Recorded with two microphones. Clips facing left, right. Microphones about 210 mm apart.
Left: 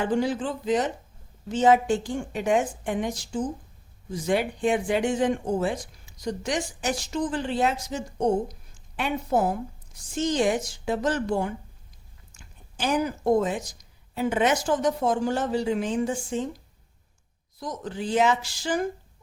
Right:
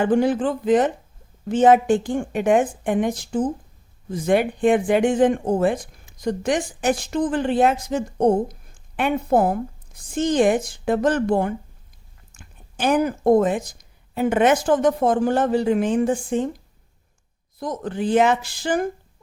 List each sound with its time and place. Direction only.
0.0 s speech: 55° right (ahead or behind)
17.6 s speech: 55° right (ahead or behind)